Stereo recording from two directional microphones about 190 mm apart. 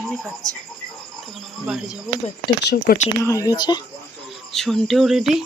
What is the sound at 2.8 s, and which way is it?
Speech, 40° left (ahead or behind).